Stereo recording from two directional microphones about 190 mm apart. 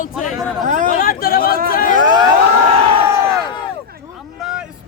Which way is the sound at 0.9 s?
50° left (ahead or behind).